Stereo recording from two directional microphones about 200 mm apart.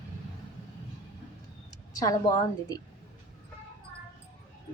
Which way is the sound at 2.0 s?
20° left (ahead or behind).